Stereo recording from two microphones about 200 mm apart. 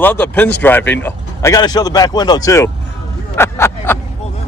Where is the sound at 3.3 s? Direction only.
10° left (ahead or behind).